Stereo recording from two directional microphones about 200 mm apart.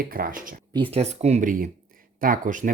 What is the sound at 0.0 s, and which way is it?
Speech, 45° right (ahead or behind).